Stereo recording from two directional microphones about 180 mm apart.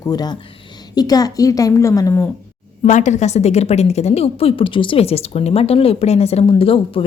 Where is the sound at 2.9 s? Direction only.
40° left (ahead or behind).